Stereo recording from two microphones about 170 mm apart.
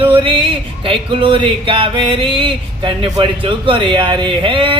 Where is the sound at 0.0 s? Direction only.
30° right (ahead or behind).